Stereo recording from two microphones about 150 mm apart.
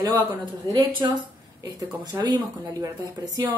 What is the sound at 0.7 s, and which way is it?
Speech, 30° right (ahead or behind).